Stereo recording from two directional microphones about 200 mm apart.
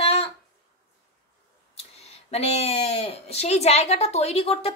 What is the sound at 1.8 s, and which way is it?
A woman's voice, 30° left (ahead or behind).